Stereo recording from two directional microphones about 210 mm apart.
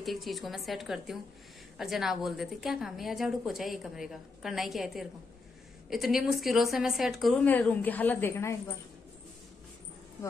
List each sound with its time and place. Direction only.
0.0 s a woman's voice: centre (ahead or behind)